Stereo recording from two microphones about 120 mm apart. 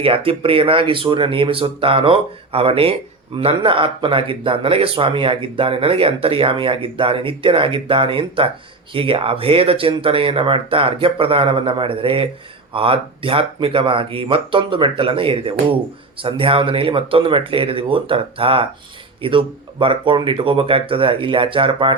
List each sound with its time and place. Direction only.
0.0 s speech: 50° right (ahead or behind)